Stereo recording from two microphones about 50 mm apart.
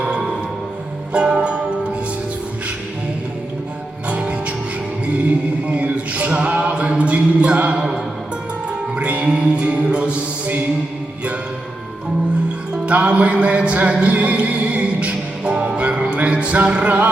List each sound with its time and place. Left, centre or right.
0.0 s music: centre
4.1 s music: right
5.6 s music: right
7.8 s music: centre
12.8 s music: right